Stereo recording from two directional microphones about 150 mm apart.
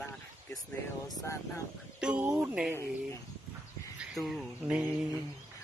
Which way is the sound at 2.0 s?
10° right (ahead or behind).